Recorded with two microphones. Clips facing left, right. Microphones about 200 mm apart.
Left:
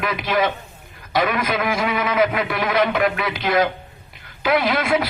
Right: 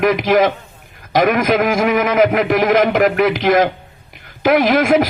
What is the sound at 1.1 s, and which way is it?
A man's voice, 45° right (ahead or behind).